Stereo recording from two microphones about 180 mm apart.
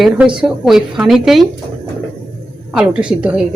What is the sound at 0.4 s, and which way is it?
Speech, centre (ahead or behind).